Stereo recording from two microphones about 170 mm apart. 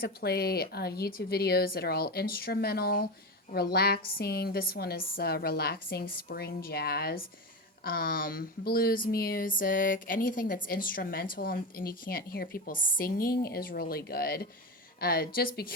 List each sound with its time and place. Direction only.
0.0 s a woman's voice: 65° left (ahead or behind)